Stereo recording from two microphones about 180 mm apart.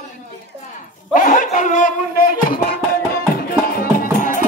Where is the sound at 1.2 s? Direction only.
50° left (ahead or behind).